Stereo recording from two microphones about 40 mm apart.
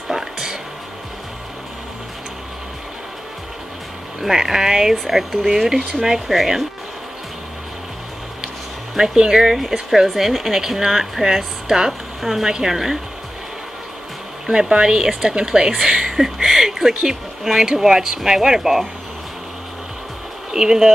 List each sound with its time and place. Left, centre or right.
0.1 s a sound: centre
4.2 s speech: centre
8.9 s speech: centre
12.2 s speech: centre
14.4 s a woman's voice: centre
20.5 s speech: centre